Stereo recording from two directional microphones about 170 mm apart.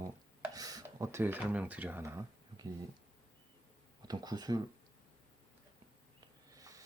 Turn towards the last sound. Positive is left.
turn(degrees=-20)  # may be behind; listen again after turning